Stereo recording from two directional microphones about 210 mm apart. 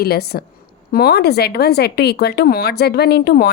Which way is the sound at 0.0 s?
50° left (ahead or behind).